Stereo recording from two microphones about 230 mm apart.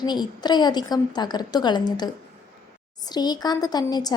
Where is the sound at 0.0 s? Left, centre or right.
Centre.